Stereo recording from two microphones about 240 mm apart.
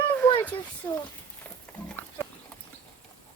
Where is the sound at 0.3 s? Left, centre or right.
Centre.